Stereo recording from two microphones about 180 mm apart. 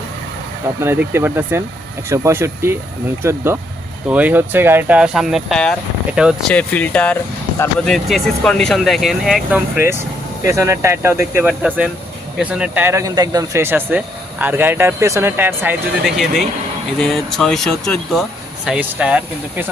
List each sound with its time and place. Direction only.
0.8 s speech: 15° right (ahead or behind)
6.5 s speech: 10° left (ahead or behind); by 15.7 s 10° right (ahead or behind)
16.0 s speech: centre (ahead or behind)